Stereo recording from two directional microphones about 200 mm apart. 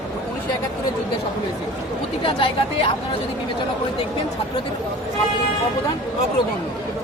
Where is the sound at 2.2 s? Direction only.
25° left (ahead or behind).